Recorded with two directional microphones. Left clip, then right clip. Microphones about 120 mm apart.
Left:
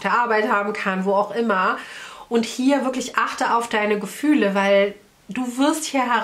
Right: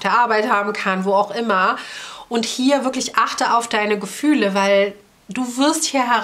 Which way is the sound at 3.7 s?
35° right (ahead or behind).